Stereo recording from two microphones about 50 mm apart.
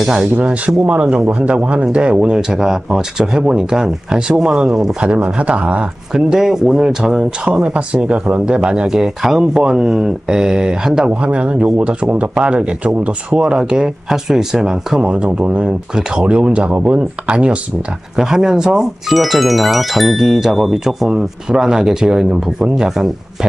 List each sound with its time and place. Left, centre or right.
0.0 s speech: centre
0.4 s speech: right
5.0 s speech: right
6.1 s speech: centre
11.1 s speech: right
15.0 s speech: right
18.1 s speech: centre
21.1 s speech: centre